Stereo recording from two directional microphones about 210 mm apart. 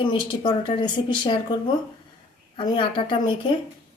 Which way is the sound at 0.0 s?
25° left (ahead or behind).